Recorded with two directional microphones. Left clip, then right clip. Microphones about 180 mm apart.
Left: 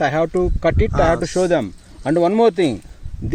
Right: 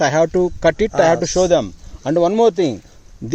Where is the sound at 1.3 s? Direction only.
Centre (ahead or behind).